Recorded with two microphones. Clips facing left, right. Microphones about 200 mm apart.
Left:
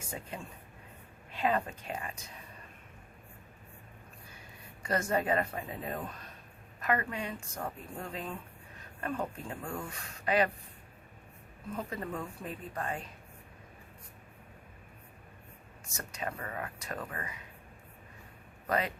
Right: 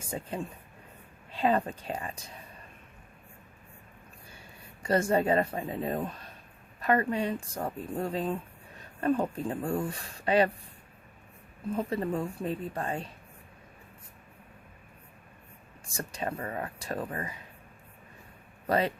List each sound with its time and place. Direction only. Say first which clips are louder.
0.1 s speech: right 8 dB; 35° right (ahead or behind)
4.8 s a woman's voice: right 5 dB; 30° right (ahead or behind)
11.8 s a woman's voice: right 7 dB; 30° right (ahead or behind)
15.9 s speech: right 5 dB; 30° right (ahead or behind)
18.7 s speech: right 5 dB; 30° right (ahead or behind)